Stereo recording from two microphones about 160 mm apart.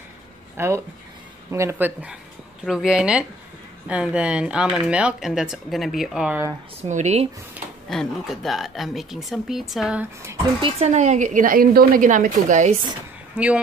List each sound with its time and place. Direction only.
0.6 s speech: 20° right (ahead or behind)
6.8 s a woman's voice: 45° right (ahead or behind)
7.9 s speech: centre (ahead or behind)
10.6 s a woman's voice: 45° right (ahead or behind)
13.4 s speech: 10° right (ahead or behind)